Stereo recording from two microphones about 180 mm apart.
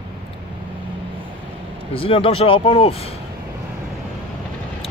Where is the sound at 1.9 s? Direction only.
30° left (ahead or behind).